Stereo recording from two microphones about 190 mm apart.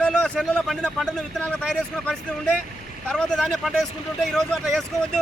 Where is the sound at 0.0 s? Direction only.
5° left (ahead or behind).